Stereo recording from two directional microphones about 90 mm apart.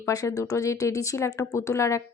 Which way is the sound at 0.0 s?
35° left (ahead or behind).